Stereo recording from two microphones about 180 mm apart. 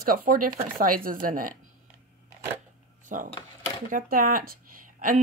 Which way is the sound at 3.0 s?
45° right (ahead or behind).